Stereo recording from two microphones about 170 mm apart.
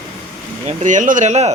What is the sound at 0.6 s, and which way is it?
Speech, 45° right (ahead or behind).